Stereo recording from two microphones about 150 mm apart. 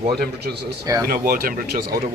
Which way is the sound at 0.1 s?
90° right.